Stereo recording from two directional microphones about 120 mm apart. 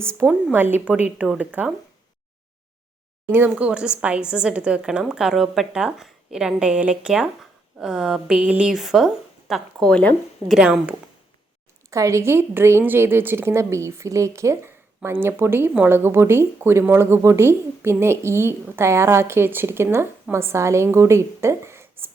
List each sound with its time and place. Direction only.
0.5 s a woman's voice: 15° right (ahead or behind)
3.3 s a woman's voice: 15° right (ahead or behind)
9.8 s speech: 10° left (ahead or behind)
10.5 s a woman's voice: 5° right (ahead or behind)
11.9 s a woman's voice: 25° right (ahead or behind)